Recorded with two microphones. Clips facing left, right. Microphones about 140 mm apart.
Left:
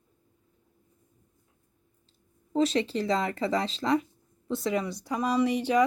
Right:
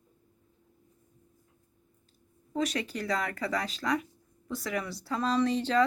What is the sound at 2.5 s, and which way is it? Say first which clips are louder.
Speech: left 6 dB; 25° left (ahead or behind).